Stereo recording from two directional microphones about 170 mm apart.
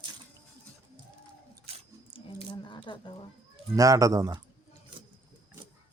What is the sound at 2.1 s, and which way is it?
Squish, 30° left (ahead or behind).